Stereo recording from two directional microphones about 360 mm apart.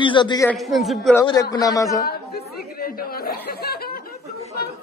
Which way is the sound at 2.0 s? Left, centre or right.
Left.